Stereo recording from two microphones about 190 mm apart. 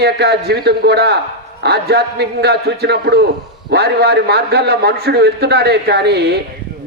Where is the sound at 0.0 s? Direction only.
60° right (ahead or behind).